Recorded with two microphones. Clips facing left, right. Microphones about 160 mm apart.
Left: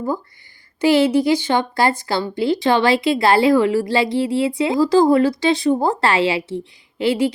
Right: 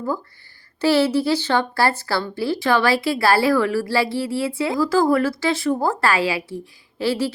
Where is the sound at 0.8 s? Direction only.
15° left (ahead or behind).